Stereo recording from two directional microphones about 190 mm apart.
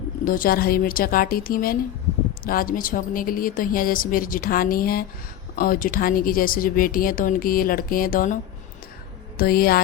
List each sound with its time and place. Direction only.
0.3 s speech: 50° left (ahead or behind)
9.4 s speech: 50° left (ahead or behind)